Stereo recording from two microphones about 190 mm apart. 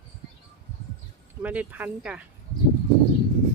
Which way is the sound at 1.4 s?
10° right (ahead or behind).